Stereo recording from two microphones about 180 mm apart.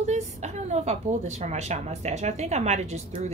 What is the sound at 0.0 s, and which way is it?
A woman's voice, 40° right (ahead or behind).